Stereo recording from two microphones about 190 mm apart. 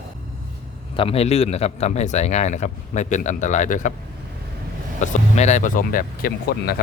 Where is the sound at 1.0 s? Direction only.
30° left (ahead or behind).